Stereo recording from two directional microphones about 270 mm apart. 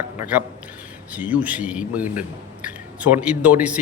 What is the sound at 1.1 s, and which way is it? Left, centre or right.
Speech, centre.